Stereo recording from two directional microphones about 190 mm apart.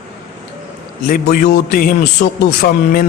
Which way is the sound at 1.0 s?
45° left (ahead or behind).